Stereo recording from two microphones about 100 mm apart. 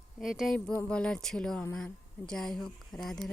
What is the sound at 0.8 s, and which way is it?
A woman's voice, 10° left (ahead or behind).